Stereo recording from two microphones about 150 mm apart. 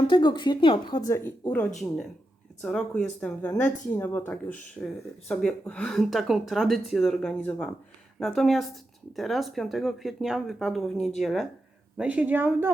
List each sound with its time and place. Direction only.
0.1 s speech: 30° left (ahead or behind); by 3.5 s 10° left (ahead or behind)
3.5 s speech: 20° left (ahead or behind)
4.3 s a woman's voice: 10° left (ahead or behind); by 12.7 s 15° right (ahead or behind)